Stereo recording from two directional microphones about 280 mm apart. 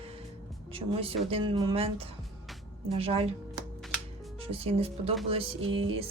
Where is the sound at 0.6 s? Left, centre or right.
Right.